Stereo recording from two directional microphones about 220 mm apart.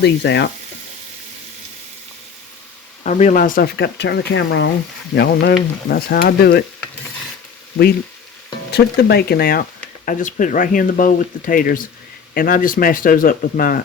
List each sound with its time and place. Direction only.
0.0 s speech: 50° left (ahead or behind)
3.0 s speech: 35° left (ahead or behind)
8.7 s speech: 45° left (ahead or behind)